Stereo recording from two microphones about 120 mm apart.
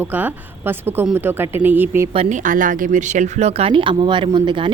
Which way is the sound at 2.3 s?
90° right.